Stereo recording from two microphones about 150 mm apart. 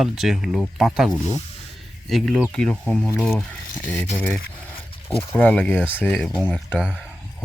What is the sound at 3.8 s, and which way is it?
Speech, 10° left (ahead or behind).